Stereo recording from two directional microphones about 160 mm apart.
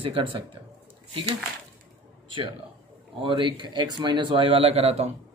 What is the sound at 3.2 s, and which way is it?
Speech, 30° right (ahead or behind).